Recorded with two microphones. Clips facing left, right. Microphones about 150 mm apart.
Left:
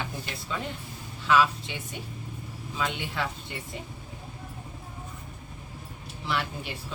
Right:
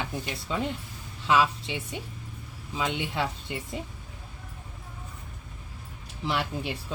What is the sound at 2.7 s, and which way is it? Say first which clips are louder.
Speech: right 2 dB; 20° right (ahead or behind).